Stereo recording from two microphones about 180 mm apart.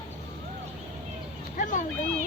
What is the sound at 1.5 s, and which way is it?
Speech, 45° left (ahead or behind).